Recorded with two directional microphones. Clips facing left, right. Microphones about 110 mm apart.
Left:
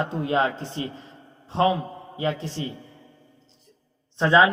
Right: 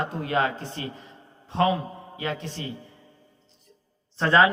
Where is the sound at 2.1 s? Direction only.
30° left (ahead or behind).